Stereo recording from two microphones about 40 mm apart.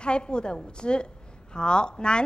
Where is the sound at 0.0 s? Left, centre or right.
Left.